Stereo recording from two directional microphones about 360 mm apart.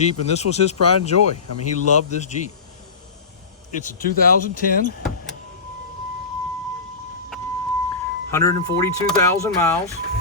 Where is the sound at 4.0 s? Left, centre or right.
Left.